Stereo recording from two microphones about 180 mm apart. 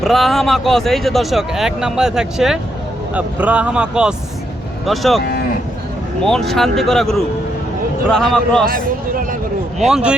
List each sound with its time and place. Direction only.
0.0 s speech: centre (ahead or behind)
6.2 s speech: centre (ahead or behind)
8.6 s speech: 55° right (ahead or behind)
9.7 s speech: centre (ahead or behind)